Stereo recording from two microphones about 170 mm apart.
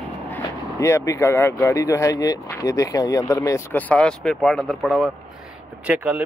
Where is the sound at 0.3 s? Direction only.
15° left (ahead or behind).